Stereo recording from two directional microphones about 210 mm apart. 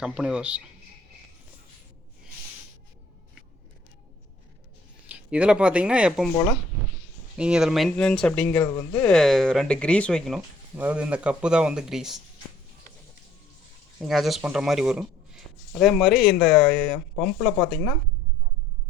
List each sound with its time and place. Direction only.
0.0 s speech: 5° right (ahead or behind)
5.0 s speech: 5° right (ahead or behind)
7.3 s speech: 5° right (ahead or behind)
8.6 s speech: 15° left (ahead or behind)
9.0 s speech: 5° left (ahead or behind)
14.1 s speech: centre (ahead or behind)